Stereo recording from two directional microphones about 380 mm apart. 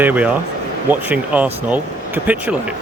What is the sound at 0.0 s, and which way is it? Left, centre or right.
Speech, centre.